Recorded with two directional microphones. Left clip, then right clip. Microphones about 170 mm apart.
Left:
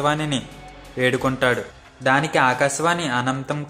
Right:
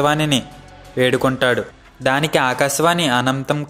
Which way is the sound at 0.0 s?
30° right (ahead or behind).